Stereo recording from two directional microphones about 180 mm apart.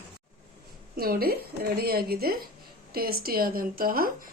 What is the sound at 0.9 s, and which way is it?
Speech, 60° right (ahead or behind).